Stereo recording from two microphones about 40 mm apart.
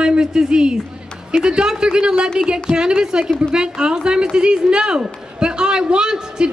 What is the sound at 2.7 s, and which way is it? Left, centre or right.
Music, right.